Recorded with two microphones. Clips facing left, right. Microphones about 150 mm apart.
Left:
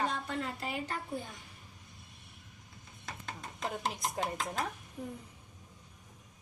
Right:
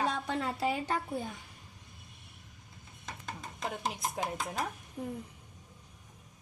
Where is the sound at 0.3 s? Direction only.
90° right.